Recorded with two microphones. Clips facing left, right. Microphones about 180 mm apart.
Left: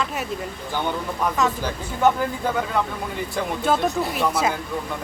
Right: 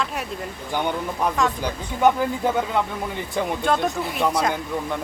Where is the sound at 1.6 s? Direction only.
15° right (ahead or behind).